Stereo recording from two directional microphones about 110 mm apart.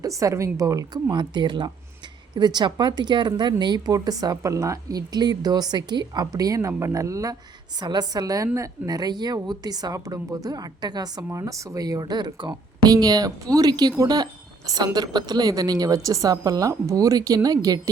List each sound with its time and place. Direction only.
0.0 s a woman's voice: 30° right (ahead or behind)
1.1 s a woman's voice: 45° right (ahead or behind)